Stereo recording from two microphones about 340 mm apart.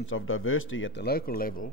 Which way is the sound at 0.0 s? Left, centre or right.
Left.